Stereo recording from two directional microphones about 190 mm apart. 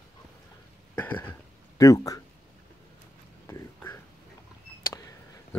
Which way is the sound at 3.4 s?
15° left (ahead or behind).